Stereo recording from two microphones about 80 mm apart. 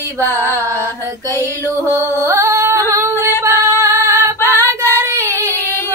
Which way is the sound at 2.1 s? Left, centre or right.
Right.